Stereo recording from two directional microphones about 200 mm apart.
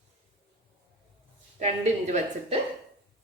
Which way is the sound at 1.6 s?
35° right (ahead or behind).